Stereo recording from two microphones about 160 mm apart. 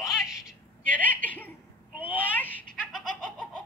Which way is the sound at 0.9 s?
10° left (ahead or behind).